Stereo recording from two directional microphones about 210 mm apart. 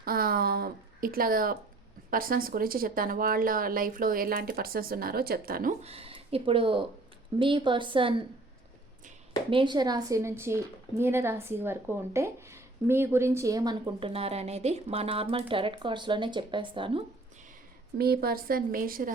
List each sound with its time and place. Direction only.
0.0 s a woman's voice: 45° right (ahead or behind)
5.8 s a woman's voice: 30° right (ahead or behind)
17.9 s a woman's voice: 45° right (ahead or behind)